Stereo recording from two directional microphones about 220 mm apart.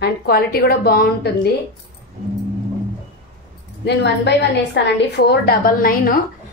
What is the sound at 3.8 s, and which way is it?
A woman's voice, 50° left (ahead or behind).